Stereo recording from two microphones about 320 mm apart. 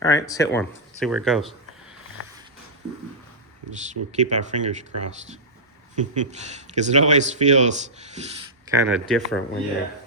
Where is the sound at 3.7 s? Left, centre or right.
Right.